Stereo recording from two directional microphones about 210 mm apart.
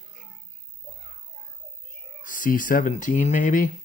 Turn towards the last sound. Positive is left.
turn(degrees=40)  # may be behind; listen again after turning